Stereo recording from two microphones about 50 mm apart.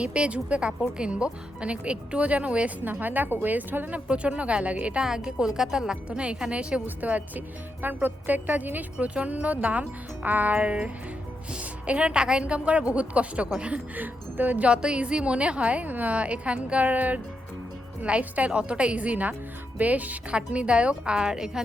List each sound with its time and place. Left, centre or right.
0.0 s a woman's voice: right
4.1 s a woman's voice: right
5.0 s a woman's voice: centre
6.8 s a woman's voice: right
14.7 s a woman's voice: centre